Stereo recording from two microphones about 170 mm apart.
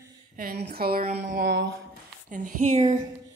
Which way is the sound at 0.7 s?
65° right (ahead or behind).